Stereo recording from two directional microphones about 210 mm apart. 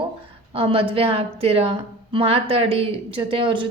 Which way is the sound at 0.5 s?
25° right (ahead or behind).